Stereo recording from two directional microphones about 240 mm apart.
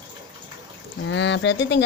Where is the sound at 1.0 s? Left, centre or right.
Left.